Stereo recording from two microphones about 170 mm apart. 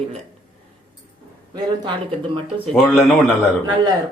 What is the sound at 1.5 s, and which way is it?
Speech, 25° right (ahead or behind).